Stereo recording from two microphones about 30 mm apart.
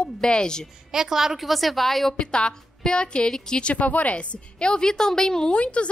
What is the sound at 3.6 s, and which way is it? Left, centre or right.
A woman's voice, left.